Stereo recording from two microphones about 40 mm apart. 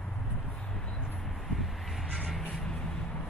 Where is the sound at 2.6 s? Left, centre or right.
Centre.